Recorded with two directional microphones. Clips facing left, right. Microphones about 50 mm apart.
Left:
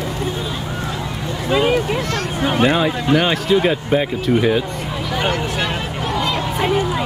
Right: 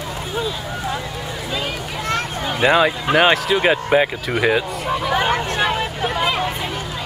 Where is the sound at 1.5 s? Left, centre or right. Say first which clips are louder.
Left 11 dB; left.